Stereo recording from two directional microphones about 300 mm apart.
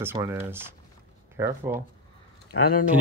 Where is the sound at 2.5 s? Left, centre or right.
Left.